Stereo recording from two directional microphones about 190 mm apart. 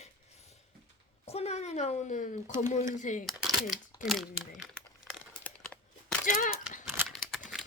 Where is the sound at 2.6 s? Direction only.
40° left (ahead or behind).